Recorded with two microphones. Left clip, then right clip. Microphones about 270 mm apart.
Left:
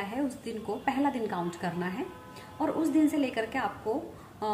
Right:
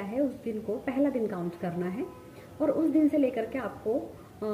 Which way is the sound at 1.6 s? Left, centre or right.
Centre.